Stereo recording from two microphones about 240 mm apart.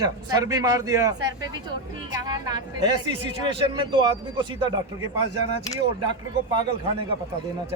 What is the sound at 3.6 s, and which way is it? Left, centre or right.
Speech, centre.